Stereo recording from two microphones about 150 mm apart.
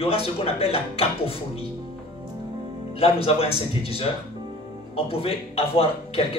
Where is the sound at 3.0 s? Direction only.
40° left (ahead or behind).